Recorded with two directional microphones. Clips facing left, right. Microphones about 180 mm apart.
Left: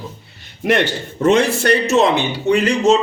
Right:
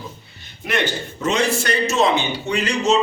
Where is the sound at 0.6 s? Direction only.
65° left (ahead or behind).